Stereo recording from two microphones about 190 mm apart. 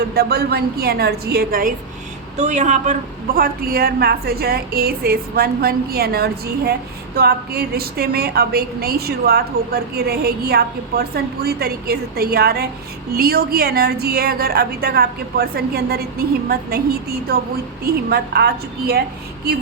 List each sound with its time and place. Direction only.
0.1 s a woman's voice: 55° right (ahead or behind)
2.4 s a woman's voice: 40° right (ahead or behind)
3.3 s a woman's voice: 50° right (ahead or behind)